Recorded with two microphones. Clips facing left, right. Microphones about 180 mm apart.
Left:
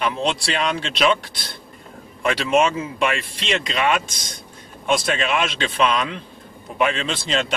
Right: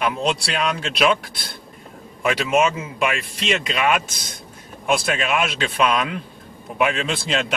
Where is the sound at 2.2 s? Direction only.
5° right (ahead or behind).